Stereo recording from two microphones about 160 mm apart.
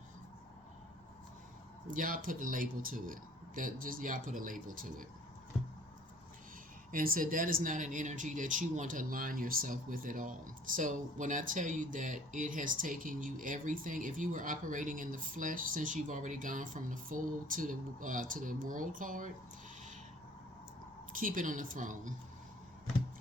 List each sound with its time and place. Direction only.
1.9 s speech: 60° right (ahead or behind)
6.9 s speech: 60° right (ahead or behind)
21.1 s speech: 60° right (ahead or behind)